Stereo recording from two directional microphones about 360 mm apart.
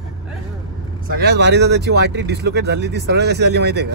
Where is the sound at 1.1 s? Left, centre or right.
Right.